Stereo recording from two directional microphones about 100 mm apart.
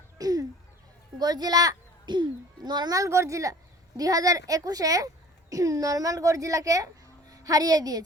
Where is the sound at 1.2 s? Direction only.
40° right (ahead or behind).